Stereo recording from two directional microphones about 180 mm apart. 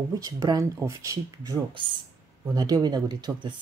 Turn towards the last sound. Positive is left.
turn(degrees=-25)  # may be behind; listen again after turning